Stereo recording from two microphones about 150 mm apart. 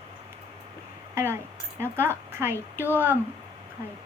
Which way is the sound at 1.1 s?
15° right (ahead or behind).